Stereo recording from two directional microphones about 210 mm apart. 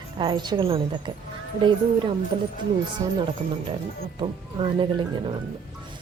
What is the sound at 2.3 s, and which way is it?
Speech, 25° right (ahead or behind).